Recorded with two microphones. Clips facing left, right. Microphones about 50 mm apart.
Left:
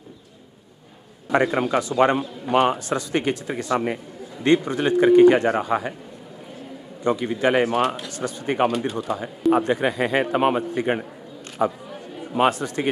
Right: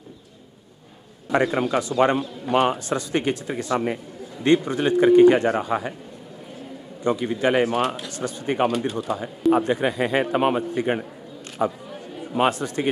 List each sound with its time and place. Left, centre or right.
1.3 s speech: centre
7.0 s speech: centre
11.6 s speech: left
12.2 s a sound: centre
12.4 s speech: centre